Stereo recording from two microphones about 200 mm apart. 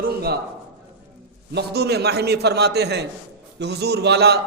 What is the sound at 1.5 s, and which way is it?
A man's voice, 55° right (ahead or behind).